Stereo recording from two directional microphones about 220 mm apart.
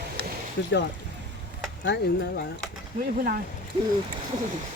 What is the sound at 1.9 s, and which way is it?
Speech, 50° left (ahead or behind).